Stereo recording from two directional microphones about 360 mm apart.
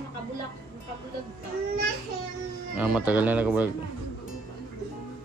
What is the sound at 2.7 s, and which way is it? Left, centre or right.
Speech, centre.